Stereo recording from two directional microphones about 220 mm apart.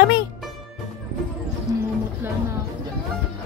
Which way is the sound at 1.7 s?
15° right (ahead or behind).